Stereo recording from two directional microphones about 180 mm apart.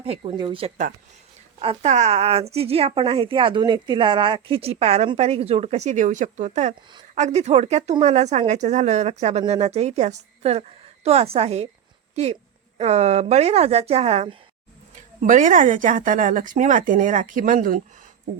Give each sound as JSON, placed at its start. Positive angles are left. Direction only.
{"t": 0.0, "sound": "a woman's voice", "side_deg": -30}
{"t": 14.9, "sound": "speech", "side_deg": -45}